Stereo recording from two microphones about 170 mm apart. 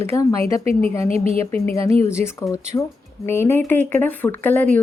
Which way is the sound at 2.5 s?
15° left (ahead or behind).